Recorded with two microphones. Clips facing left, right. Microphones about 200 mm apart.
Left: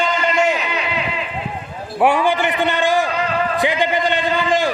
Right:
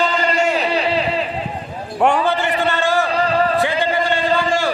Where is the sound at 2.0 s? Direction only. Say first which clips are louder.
Left 1 dB; 10° left (ahead or behind).